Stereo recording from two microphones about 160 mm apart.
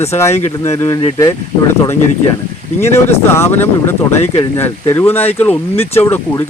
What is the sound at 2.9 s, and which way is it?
Speech, 15° left (ahead or behind).